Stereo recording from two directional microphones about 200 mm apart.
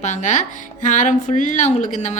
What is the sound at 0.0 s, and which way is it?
A woman's voice, 35° left (ahead or behind).